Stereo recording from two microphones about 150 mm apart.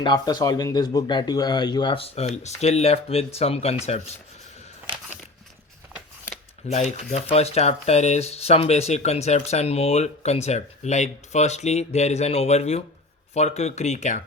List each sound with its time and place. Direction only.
0.0 s speech: 25° left (ahead or behind); by 4.1 s 45° left (ahead or behind)
6.7 s speech: 50° left (ahead or behind)